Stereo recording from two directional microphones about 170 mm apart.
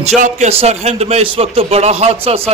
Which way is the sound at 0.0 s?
40° right (ahead or behind).